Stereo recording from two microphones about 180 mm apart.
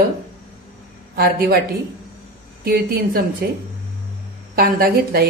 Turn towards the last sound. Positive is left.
turn(degrees=-55)  # may be behind; listen again after turning